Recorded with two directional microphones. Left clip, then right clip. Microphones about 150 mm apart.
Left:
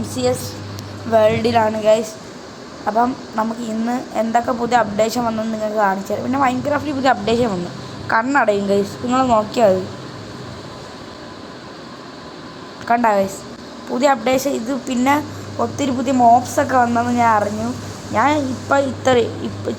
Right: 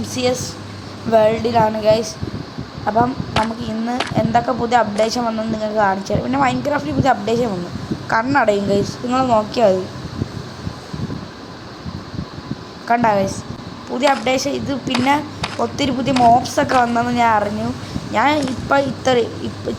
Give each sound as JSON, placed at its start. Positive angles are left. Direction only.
{"t": 0.0, "sound": "speech", "side_deg": 0}
{"t": 1.4, "sound": "speech", "side_deg": 10}
{"t": 12.9, "sound": "speech", "side_deg": 5}
{"t": 13.9, "sound": "speech", "side_deg": 15}